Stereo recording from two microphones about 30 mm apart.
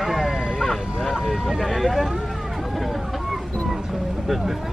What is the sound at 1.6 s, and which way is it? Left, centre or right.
Speech, centre.